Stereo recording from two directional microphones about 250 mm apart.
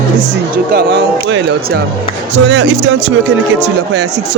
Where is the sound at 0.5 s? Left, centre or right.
Right.